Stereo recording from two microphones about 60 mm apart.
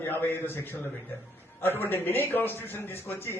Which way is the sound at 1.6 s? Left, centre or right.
Left.